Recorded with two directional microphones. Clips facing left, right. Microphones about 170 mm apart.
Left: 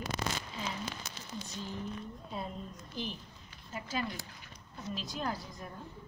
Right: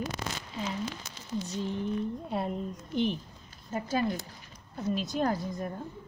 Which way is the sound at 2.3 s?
65° right (ahead or behind).